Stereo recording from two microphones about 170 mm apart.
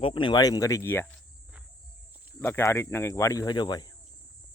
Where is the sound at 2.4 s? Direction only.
15° left (ahead or behind).